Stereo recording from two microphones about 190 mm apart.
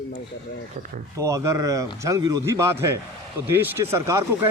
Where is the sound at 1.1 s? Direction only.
15° right (ahead or behind).